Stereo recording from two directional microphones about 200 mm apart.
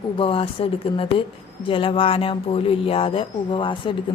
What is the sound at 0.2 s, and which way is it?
A woman's voice, 25° left (ahead or behind).